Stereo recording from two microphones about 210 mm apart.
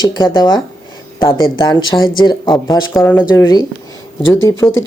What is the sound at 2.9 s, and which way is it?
Speech, 5° left (ahead or behind).